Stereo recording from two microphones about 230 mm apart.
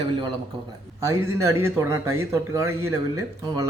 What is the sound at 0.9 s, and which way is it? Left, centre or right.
Speech, centre.